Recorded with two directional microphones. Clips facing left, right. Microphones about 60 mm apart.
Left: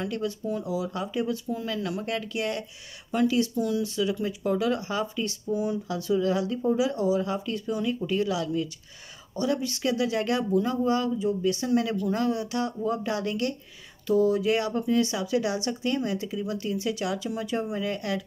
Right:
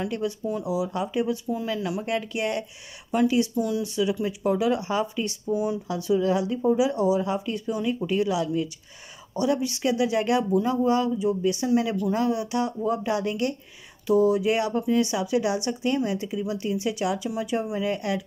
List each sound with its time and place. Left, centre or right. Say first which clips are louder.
0.0 s speech: right 2 dB; centre
3.5 s speech: right 1 dB; centre
5.5 s speech: right 2 dB; centre